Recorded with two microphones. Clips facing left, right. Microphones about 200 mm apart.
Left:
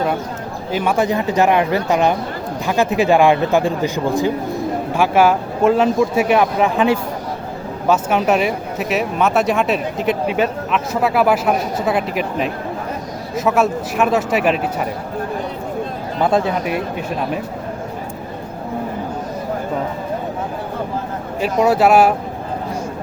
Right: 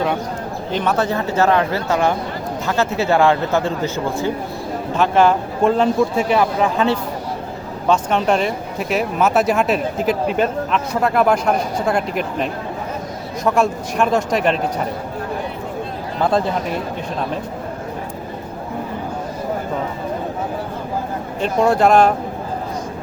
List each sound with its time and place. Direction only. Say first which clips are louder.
0.7 s speech: left 2 dB; 10° left (ahead or behind)
16.2 s speech: left 1 dB; 5° left (ahead or behind)
21.4 s speech: left 1 dB; 5° left (ahead or behind)